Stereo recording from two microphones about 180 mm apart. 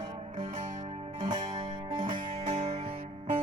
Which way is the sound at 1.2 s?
25° right (ahead or behind).